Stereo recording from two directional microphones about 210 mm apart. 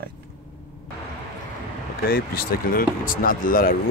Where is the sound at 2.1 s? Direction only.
45° left (ahead or behind).